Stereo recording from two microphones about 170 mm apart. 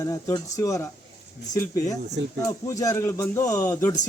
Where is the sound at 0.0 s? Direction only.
20° left (ahead or behind).